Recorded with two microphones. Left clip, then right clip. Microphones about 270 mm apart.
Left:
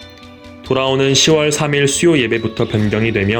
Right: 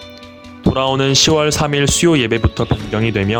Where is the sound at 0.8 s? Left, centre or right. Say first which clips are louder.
Left 1 dB; right.